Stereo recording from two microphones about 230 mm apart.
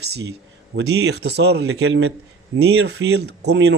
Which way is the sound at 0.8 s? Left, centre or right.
Right.